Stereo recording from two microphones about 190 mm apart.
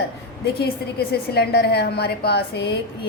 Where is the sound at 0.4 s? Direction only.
55° left (ahead or behind).